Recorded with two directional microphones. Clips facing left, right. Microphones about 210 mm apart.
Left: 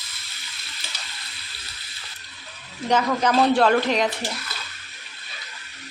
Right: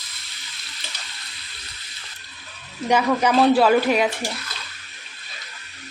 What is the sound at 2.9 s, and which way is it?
A man's voice, 10° right (ahead or behind).